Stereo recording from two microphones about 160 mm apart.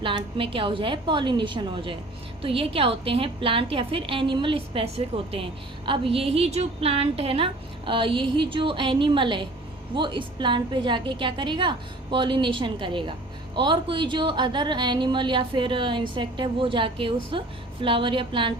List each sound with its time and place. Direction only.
0.0 s a woman's voice: 35° right (ahead or behind)